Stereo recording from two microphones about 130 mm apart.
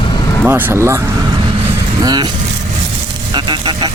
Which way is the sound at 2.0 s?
35° right (ahead or behind).